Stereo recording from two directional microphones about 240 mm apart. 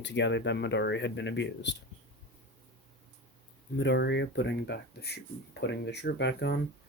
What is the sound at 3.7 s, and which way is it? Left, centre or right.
Speech, left.